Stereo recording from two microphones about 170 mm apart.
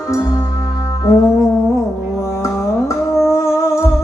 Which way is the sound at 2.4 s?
15° left (ahead or behind).